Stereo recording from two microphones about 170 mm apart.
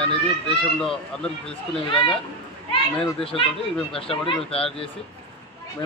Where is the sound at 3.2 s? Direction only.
35° left (ahead or behind).